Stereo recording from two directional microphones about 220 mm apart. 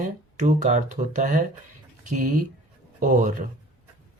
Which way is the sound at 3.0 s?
35° right (ahead or behind).